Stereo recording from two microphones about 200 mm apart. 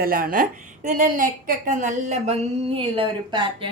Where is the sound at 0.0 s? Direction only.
45° right (ahead or behind); by 3.4 s 25° right (ahead or behind).